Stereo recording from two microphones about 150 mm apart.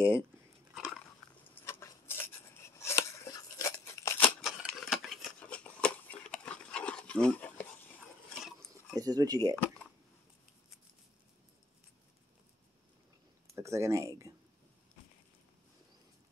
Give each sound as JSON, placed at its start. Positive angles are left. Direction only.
{"t": 1.5, "sound": "scissors", "side_deg": 15}
{"t": 4.4, "sound": "a sound", "side_deg": 0}
{"t": 8.3, "sound": "pig", "side_deg": 0}
{"t": 8.5, "sound": "keys jangling", "side_deg": -20}
{"t": 13.6, "sound": "speech", "side_deg": -20}